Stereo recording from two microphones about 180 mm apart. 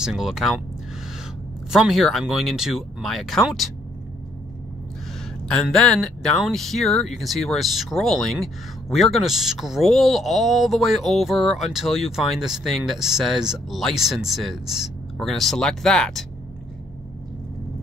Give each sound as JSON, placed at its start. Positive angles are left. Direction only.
{"t": 0.0, "sound": "speech", "side_deg": -5}
{"t": 1.7, "sound": "speech", "side_deg": 0}
{"t": 5.5, "sound": "speech", "side_deg": 5}